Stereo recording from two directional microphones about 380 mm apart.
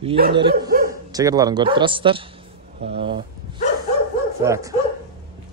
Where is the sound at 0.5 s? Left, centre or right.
Right.